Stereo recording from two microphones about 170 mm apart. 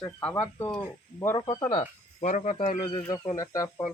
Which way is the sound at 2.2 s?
45° left (ahead or behind).